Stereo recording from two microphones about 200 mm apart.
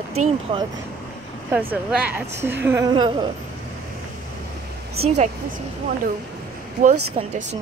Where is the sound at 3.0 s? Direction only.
25° right (ahead or behind).